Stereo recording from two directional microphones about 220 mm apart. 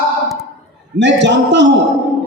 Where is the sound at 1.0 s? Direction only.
55° right (ahead or behind).